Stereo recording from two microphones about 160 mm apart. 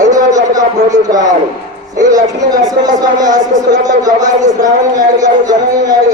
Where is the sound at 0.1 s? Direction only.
20° right (ahead or behind).